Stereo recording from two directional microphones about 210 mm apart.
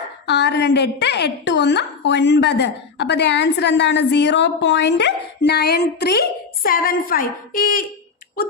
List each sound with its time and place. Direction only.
0.3 s a woman's voice: 55° left (ahead or behind)